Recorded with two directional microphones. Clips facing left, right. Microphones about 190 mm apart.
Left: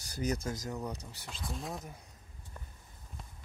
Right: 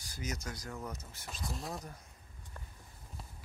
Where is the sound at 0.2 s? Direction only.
30° left (ahead or behind).